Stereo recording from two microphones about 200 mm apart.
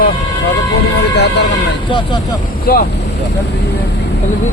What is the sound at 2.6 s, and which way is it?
Speech, 50° left (ahead or behind).